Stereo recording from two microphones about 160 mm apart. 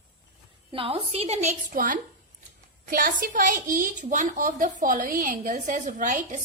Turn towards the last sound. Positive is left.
turn(degrees=-50)  # may be behind; listen again after turning